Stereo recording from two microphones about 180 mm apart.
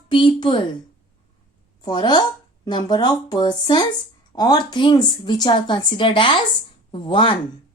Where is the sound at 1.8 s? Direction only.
25° left (ahead or behind).